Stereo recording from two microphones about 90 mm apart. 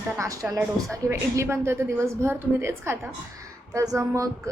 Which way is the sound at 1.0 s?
30° right (ahead or behind).